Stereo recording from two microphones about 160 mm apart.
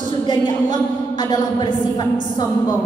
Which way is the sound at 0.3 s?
30° left (ahead or behind).